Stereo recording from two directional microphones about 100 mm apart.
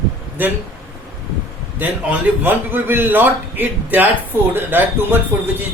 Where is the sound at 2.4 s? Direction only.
20° right (ahead or behind).